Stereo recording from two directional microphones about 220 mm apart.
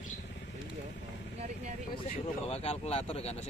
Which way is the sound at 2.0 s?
30° left (ahead or behind).